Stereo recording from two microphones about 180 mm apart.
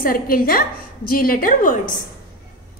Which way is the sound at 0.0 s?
50° left (ahead or behind).